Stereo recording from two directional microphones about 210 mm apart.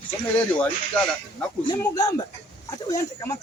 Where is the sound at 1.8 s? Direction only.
15° left (ahead or behind).